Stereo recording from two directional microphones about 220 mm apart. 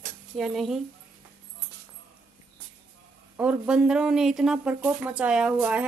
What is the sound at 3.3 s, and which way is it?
Speech, 5° right (ahead or behind).